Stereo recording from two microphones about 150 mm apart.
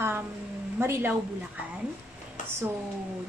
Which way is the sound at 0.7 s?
15° right (ahead or behind).